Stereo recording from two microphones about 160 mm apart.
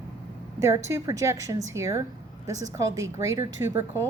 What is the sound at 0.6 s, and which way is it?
A woman's voice, 15° right (ahead or behind).